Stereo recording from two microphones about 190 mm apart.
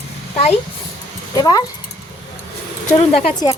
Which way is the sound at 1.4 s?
20° left (ahead or behind).